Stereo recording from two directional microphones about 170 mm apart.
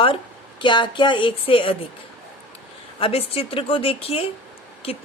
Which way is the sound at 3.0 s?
35° left (ahead or behind).